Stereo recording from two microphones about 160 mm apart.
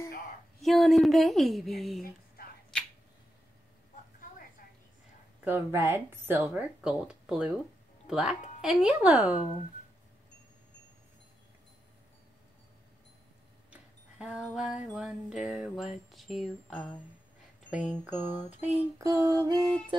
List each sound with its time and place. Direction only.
0.6 s a woman's voice: centre (ahead or behind)
2.7 s a sound: 5° left (ahead or behind)
5.4 s a woman's voice: 15° right (ahead or behind)
13.7 s a sound: 5° right (ahead or behind)
15.0 s a woman's voice: 5° right (ahead or behind)
18.9 s female singing: 20° right (ahead or behind)
19.9 s female singing: 30° right (ahead or behind)